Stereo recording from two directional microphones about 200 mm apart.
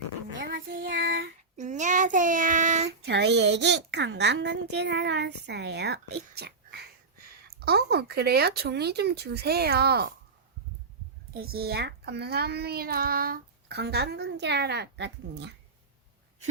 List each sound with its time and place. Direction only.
0.3 s child singing: 45° right (ahead or behind)
1.5 s child singing: 35° right (ahead or behind)
3.0 s a woman's voice: 60° right (ahead or behind)
11.3 s a child's voice: 50° right (ahead or behind)